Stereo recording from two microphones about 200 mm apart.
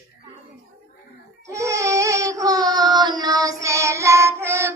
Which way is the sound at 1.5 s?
15° right (ahead or behind).